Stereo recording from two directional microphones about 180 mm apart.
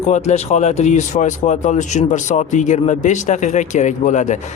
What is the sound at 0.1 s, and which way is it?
Speech, 40° left (ahead or behind).